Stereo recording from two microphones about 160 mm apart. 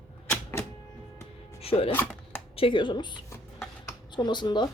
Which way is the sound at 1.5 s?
40° left (ahead or behind).